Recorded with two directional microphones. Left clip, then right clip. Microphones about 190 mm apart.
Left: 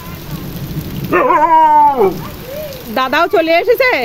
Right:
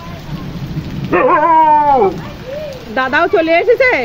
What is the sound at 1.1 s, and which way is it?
Speech, 30° left (ahead or behind).